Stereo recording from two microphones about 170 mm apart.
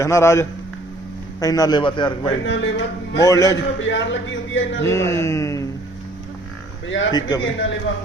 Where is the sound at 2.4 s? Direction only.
90° left.